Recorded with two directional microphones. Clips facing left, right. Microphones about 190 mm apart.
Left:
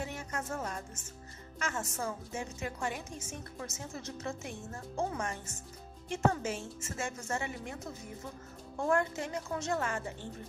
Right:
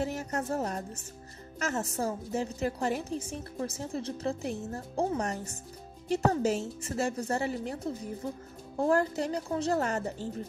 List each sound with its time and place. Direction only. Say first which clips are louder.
0.0 s a woman's voice: right 7 dB; 40° right (ahead or behind)